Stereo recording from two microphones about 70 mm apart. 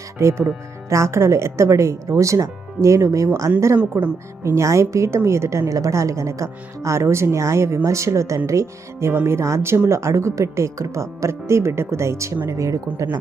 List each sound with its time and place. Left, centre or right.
0.2 s a woman's voice: right